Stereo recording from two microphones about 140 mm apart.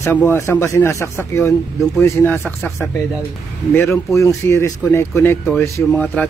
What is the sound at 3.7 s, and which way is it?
Speech, 20° left (ahead or behind).